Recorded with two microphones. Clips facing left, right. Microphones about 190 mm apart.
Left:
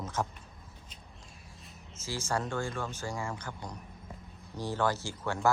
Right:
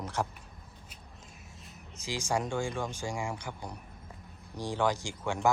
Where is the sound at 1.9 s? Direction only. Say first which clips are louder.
Right 2 dB; 15° right (ahead or behind).